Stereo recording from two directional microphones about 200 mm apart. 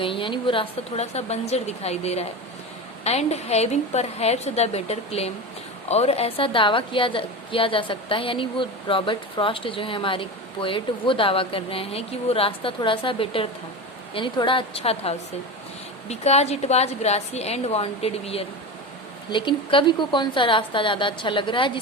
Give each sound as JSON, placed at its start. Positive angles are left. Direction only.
{"t": 0.0, "sound": "a woman's voice", "side_deg": 25}